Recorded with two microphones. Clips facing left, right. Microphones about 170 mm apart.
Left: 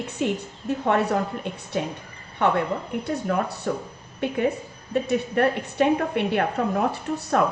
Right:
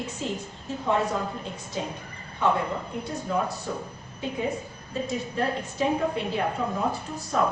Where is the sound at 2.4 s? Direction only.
65° left (ahead or behind).